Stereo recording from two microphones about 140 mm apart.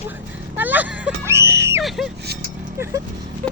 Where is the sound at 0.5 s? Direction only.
10° right (ahead or behind).